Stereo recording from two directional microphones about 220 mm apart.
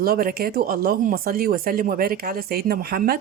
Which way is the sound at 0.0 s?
40° right (ahead or behind).